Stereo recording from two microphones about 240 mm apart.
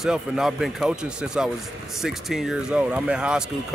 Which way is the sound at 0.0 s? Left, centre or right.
Centre.